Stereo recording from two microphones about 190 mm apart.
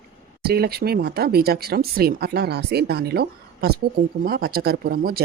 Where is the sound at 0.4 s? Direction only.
55° right (ahead or behind).